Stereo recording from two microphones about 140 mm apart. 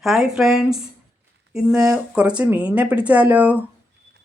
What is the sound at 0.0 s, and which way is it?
A woman's voice, 5° right (ahead or behind).